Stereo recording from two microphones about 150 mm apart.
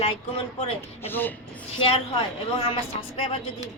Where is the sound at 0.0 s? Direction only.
40° left (ahead or behind).